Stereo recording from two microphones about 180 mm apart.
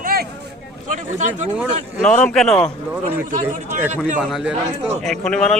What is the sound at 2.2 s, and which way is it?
Speech, centre (ahead or behind).